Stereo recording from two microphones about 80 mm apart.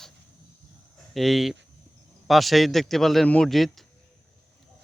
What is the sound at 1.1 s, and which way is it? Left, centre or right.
A man's voice, centre.